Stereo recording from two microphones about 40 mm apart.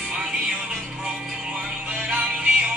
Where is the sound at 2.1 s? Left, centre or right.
Right.